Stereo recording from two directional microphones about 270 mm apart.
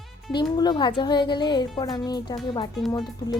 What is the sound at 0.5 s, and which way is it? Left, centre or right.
A woman's voice, centre.